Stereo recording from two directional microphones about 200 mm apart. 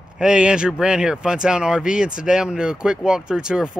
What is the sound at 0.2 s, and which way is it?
Speech, 5° right (ahead or behind).